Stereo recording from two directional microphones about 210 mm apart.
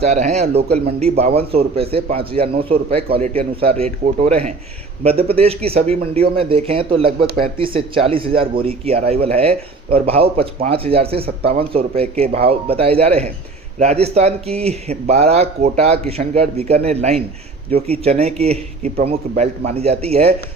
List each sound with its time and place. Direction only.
0.0 s speech: 30° right (ahead or behind)